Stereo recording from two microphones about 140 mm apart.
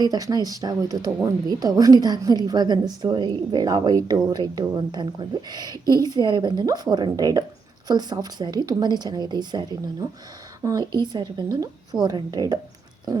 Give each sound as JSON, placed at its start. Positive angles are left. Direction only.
{"t": 0.0, "sound": "a woman's voice", "side_deg": -30}
{"t": 5.7, "sound": "a woman's voice", "side_deg": 20}
{"t": 6.0, "sound": "a woman's voice", "side_deg": -30}